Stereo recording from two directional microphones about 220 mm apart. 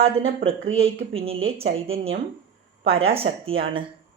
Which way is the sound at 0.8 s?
25° right (ahead or behind).